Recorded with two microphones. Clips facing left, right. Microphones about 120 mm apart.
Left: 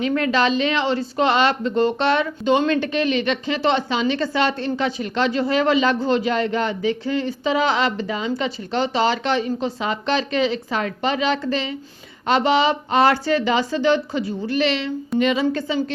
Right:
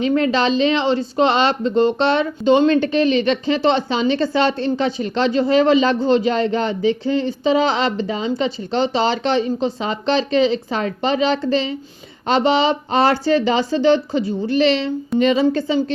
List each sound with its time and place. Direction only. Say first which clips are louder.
0.0 s a woman's voice: right 2 dB; 25° right (ahead or behind)